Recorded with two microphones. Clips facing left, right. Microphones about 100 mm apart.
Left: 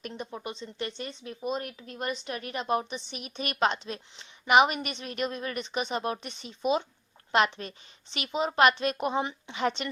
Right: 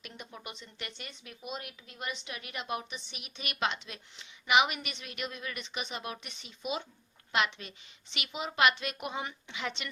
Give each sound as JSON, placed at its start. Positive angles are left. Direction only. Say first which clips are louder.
{"t": 0.1, "sound": "speech", "louder": "left 8 dB", "side_deg": 30}